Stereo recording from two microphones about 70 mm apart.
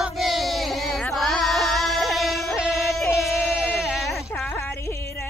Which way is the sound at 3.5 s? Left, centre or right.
Left.